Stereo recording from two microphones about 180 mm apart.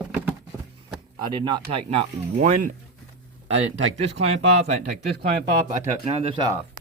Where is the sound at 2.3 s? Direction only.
45° right (ahead or behind).